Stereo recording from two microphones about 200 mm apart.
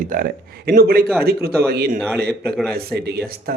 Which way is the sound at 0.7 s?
50° right (ahead or behind).